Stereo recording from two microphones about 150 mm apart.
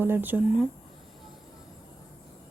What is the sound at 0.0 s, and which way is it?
Speech, 15° right (ahead or behind).